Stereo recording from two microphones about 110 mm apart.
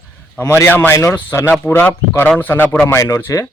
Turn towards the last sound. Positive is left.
turn(degrees=25)  # may be behind; listen again after turning